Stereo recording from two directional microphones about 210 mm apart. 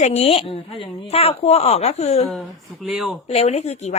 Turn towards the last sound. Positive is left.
turn(degrees=30)  # may be behind; listen again after turning